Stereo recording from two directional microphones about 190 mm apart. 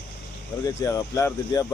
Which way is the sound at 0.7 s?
15° left (ahead or behind).